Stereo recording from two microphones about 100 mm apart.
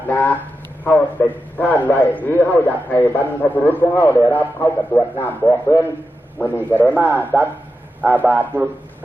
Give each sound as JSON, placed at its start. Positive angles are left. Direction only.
{"t": 0.1, "sound": "a man's voice", "side_deg": 15}
{"t": 7.2, "sound": "a man's voice", "side_deg": -20}